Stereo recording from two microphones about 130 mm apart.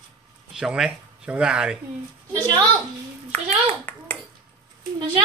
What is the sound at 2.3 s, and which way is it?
Speech, 35° right (ahead or behind).